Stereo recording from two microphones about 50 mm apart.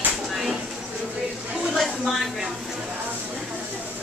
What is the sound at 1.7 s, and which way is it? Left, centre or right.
Speech, centre.